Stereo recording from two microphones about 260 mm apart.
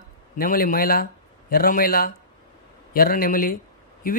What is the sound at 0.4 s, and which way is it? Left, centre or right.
A man's voice, left.